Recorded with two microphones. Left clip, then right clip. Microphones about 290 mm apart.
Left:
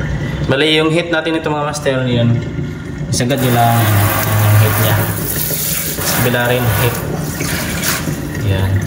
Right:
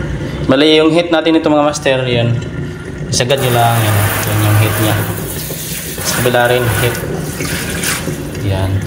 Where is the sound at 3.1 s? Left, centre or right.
Centre.